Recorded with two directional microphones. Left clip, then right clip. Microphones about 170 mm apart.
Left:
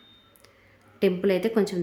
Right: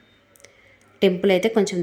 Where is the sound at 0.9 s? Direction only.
15° right (ahead or behind).